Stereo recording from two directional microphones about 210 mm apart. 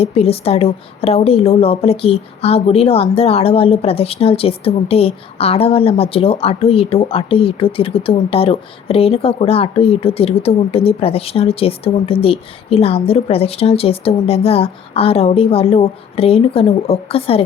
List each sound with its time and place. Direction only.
0.0 s a woman's voice: 30° left (ahead or behind)